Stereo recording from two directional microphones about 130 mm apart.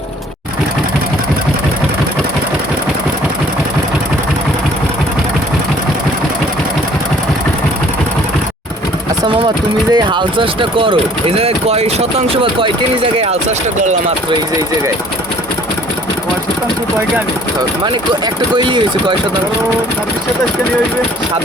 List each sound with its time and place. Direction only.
9.9 s speech: 35° right (ahead or behind)
18.5 s speech: 35° right (ahead or behind)